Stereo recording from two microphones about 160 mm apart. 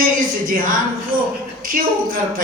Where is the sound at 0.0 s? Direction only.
60° right (ahead or behind).